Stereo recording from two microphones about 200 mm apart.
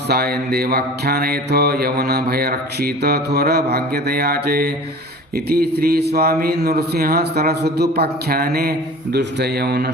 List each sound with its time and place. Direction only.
0.1 s mantra: 50° right (ahead or behind)